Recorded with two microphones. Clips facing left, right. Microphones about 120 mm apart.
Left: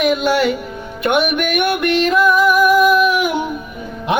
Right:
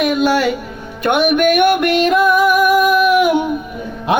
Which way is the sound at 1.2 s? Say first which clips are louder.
Right 6 dB; 45° right (ahead or behind).